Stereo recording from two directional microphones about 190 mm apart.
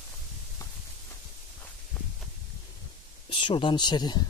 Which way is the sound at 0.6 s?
15° left (ahead or behind).